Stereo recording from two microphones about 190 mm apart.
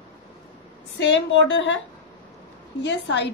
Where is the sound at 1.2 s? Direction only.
70° left (ahead or behind).